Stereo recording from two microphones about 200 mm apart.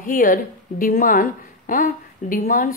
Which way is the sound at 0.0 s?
40° left (ahead or behind).